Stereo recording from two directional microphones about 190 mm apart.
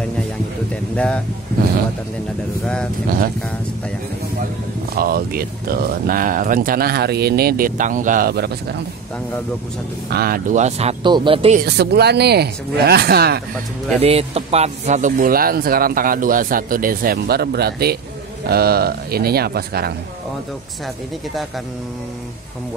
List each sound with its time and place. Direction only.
0.9 s speech: 5° left (ahead or behind)
2.6 s speech: 5° left (ahead or behind)
4.9 s speech: 50° right (ahead or behind)
10.0 s speech: 55° right (ahead or behind); by 11.5 s 30° right (ahead or behind)
11.5 s speech: 55° right (ahead or behind)
14.0 s speech: 30° right (ahead or behind); by 19.9 s 55° right (ahead or behind)